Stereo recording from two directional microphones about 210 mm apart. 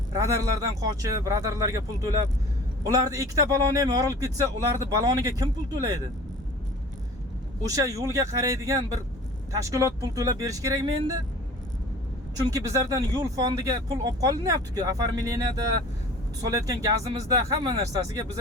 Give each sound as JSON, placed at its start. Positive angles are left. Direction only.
{"t": 0.1, "sound": "speech", "side_deg": -15}
{"t": 7.7, "sound": "speech", "side_deg": -15}
{"t": 12.5, "sound": "speech", "side_deg": -15}